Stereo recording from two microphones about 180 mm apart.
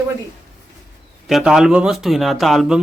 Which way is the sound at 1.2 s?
Centre (ahead or behind).